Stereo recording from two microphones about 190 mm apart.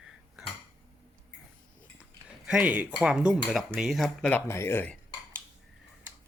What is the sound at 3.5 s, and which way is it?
Cutlery, centre (ahead or behind).